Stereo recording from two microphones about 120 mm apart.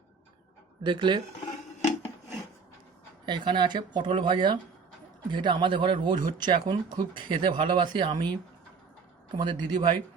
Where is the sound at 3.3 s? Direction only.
40° right (ahead or behind).